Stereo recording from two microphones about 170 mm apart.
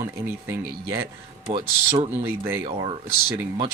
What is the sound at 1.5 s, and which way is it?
Speech, 30° right (ahead or behind).